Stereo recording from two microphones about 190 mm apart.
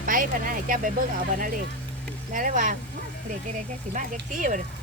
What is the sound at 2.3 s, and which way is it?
Speech, 45° right (ahead or behind).